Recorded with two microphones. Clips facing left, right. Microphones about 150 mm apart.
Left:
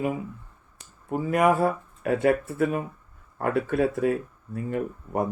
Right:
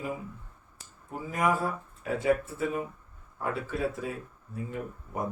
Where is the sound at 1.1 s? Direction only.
65° left (ahead or behind).